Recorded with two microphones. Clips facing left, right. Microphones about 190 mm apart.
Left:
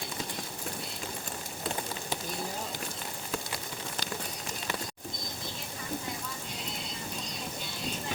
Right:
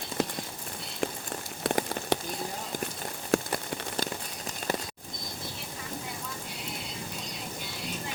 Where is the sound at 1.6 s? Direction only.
70° right (ahead or behind).